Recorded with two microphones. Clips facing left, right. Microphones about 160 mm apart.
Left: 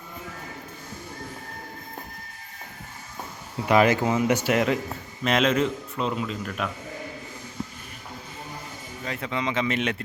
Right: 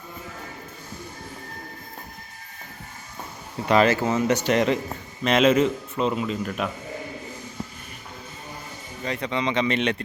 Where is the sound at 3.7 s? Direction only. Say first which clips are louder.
Even; 15° left (ahead or behind); by 6.7 s 5° right (ahead or behind).